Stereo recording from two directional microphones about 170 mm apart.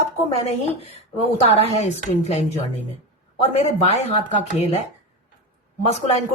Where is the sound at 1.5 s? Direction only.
40° left (ahead or behind).